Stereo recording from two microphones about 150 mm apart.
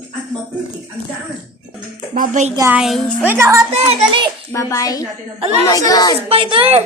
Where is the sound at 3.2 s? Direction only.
15° right (ahead or behind).